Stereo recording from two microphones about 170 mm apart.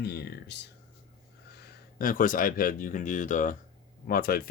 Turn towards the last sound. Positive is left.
turn(degrees=60)  # may be behind; listen again after turning